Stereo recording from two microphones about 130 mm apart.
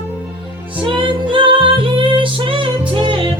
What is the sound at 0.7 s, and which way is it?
Music, 40° right (ahead or behind).